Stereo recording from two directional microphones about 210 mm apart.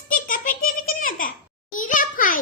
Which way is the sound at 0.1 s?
40° left (ahead or behind).